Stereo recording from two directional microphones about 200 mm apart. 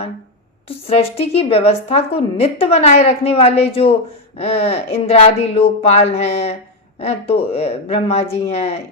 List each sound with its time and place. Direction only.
0.7 s a woman's voice: 30° left (ahead or behind)